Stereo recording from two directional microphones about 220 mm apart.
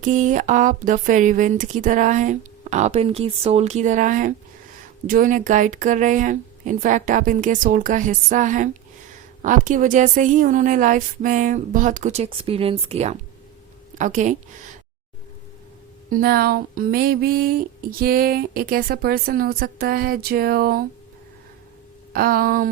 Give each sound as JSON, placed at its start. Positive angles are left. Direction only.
{"t": 0.0, "sound": "speech", "side_deg": -35}
{"t": 16.2, "sound": "female singing", "side_deg": -45}
{"t": 22.1, "sound": "speech", "side_deg": -40}